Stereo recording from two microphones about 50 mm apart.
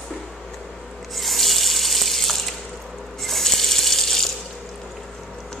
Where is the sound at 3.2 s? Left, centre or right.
Centre.